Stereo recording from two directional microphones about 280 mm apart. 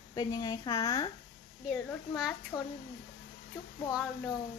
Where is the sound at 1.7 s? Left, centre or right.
Centre.